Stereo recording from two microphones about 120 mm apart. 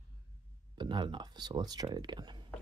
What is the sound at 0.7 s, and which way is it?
Speech, 40° right (ahead or behind).